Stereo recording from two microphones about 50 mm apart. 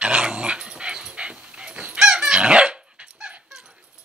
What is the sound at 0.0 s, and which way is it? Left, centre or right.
Dog, centre.